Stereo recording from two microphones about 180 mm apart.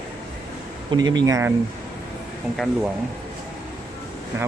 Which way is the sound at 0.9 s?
25° right (ahead or behind).